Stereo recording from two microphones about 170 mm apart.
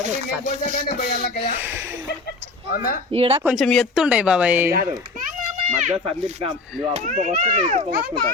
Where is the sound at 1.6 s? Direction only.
15° right (ahead or behind).